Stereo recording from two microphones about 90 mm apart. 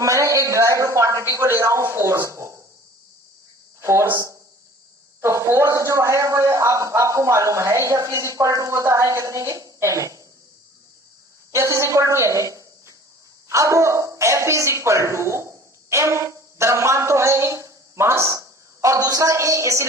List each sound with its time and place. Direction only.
0.0 s a man's voice: 35° right (ahead or behind)
3.8 s a sound: 35° right (ahead or behind)
4.1 s a man's voice: 35° right (ahead or behind)
11.5 s a woman's voice: 35° right (ahead or behind)